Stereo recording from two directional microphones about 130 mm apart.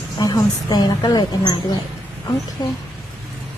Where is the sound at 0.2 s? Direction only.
30° left (ahead or behind).